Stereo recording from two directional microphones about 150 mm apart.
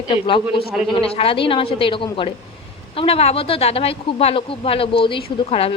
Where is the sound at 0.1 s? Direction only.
35° left (ahead or behind).